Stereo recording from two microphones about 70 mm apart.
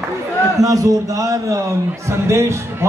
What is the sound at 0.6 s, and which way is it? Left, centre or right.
A man's voice, right.